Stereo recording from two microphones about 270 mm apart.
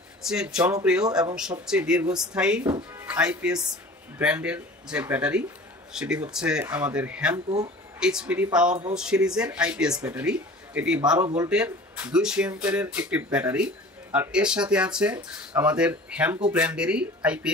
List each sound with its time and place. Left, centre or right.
0.2 s speech: centre
7.3 s speech: centre
8.0 s speech: centre